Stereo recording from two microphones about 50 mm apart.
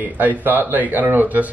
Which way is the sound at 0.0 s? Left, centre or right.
Right.